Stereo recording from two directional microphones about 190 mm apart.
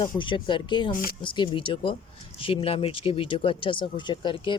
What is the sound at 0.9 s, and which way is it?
Speech, 45° left (ahead or behind).